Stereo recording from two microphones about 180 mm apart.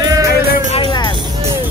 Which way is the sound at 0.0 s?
20° right (ahead or behind).